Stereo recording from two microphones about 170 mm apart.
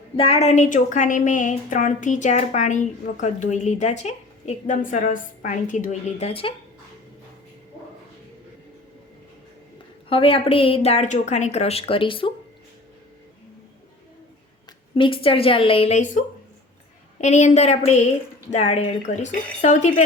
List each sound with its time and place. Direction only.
0.2 s a woman's voice: 35° left (ahead or behind)
10.1 s speech: 35° left (ahead or behind)
14.9 s a woman's voice: 30° left (ahead or behind)